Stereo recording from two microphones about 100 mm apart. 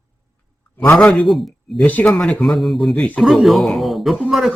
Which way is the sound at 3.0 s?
10° left (ahead or behind).